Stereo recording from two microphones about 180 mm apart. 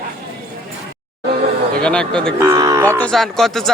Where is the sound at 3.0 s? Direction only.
Centre (ahead or behind).